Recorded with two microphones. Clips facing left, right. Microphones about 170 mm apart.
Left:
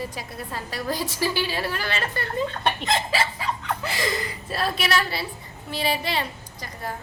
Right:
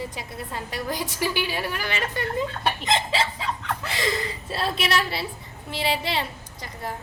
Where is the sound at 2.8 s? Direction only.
20° right (ahead or behind).